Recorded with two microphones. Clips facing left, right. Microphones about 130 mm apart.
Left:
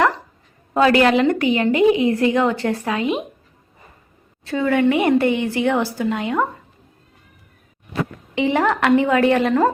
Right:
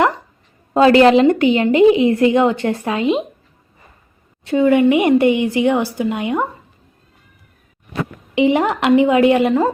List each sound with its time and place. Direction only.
0.7 s a woman's voice: 25° right (ahead or behind)
4.4 s a woman's voice: 15° right (ahead or behind)
8.4 s a woman's voice: 15° right (ahead or behind)